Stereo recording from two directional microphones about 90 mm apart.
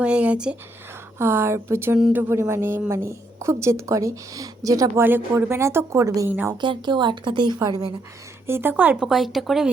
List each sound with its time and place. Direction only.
0.0 s speech: 15° right (ahead or behind)
1.2 s a woman's voice: 25° right (ahead or behind); by 4.9 s 40° right (ahead or behind)
4.9 s speech: 25° right (ahead or behind)
6.2 s speech: 20° right (ahead or behind)
6.5 s speech: 55° right (ahead or behind)
7.6 s speech: 45° right (ahead or behind)
8.4 s speech: 25° right (ahead or behind)
9.0 s speech: 5° right (ahead or behind)